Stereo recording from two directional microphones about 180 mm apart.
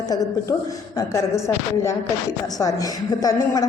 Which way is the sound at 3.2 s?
20° left (ahead or behind).